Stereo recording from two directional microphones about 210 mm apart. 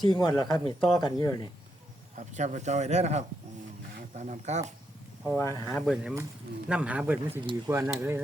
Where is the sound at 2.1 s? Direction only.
35° right (ahead or behind).